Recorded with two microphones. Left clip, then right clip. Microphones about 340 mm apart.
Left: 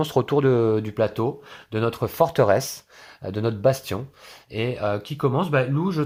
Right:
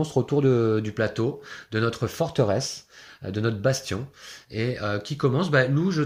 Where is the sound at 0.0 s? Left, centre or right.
Left.